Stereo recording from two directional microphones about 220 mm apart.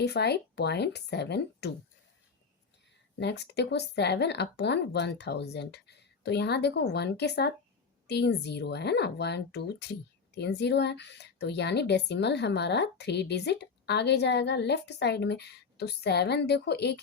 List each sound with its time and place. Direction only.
0.0 s speech: 50° left (ahead or behind)
3.2 s speech: 50° left (ahead or behind)